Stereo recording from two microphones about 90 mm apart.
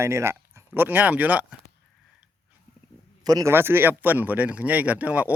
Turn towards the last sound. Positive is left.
turn(degrees=-15)  # may be behind; listen again after turning